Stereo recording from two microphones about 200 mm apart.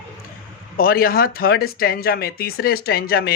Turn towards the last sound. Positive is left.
turn(degrees=50)  # may be behind; listen again after turning